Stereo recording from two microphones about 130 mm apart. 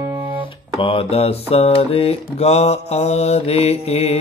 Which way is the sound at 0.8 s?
45° left (ahead or behind).